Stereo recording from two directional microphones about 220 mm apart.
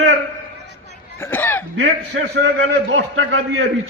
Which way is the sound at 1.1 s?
10° left (ahead or behind).